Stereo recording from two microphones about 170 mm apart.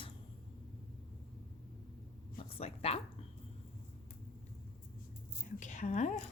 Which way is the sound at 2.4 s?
35° left (ahead or behind).